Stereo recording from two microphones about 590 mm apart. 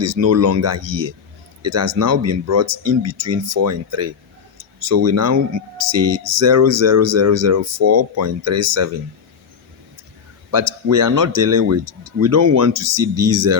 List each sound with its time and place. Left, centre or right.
0.0 s speech: right
10.5 s speech: right